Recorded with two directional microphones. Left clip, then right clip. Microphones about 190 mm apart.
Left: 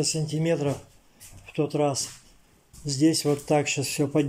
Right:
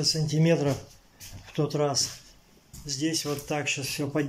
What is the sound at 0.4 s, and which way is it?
A man's voice, centre (ahead or behind).